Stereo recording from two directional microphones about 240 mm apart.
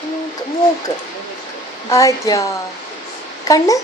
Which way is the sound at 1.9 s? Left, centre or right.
Centre.